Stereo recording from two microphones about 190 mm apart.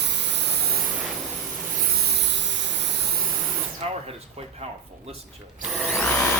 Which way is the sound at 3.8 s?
30° right (ahead or behind).